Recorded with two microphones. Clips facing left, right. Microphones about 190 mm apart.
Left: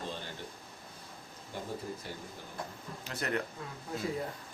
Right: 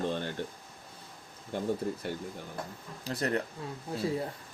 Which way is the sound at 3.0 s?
35° right (ahead or behind).